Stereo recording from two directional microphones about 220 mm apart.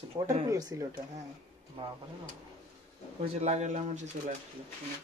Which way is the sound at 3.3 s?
30° right (ahead or behind).